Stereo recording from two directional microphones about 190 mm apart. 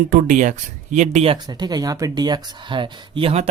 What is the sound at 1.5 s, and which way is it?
Speech, 20° right (ahead or behind).